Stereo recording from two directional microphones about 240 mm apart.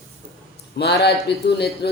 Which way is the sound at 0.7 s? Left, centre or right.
Left.